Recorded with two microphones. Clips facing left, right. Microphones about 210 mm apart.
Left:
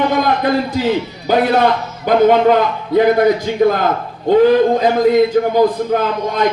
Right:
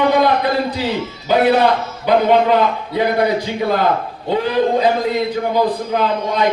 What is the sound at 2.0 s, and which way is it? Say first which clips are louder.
A man's voice: left 3 dB; 45° left (ahead or behind).